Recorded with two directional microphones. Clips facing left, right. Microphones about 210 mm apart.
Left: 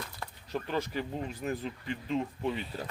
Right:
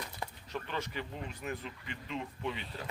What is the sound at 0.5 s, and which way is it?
Speech, 35° left (ahead or behind).